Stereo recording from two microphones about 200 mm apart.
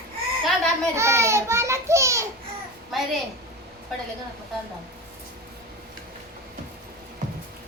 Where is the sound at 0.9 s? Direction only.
15° right (ahead or behind).